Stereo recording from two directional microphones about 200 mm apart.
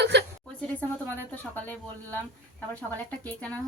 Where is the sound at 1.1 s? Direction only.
10° left (ahead or behind).